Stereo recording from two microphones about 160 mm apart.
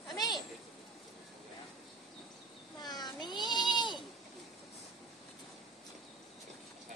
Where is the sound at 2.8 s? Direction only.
25° left (ahead or behind).